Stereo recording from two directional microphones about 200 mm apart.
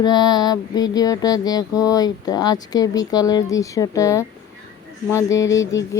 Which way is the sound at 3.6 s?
15° left (ahead or behind).